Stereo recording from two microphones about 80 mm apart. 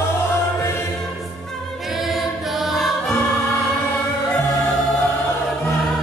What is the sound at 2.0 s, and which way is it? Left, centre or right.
Choir, centre.